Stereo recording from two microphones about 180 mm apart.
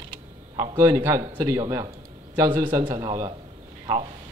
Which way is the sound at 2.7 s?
25° right (ahead or behind).